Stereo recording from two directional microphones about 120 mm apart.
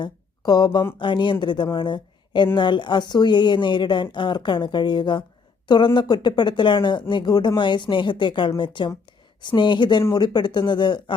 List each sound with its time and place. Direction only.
0.0 s speech: 35° left (ahead or behind)